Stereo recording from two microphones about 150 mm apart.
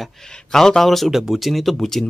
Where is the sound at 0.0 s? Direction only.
5° left (ahead or behind).